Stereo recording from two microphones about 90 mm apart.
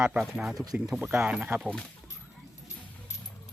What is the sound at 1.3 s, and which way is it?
Speech, 15° right (ahead or behind).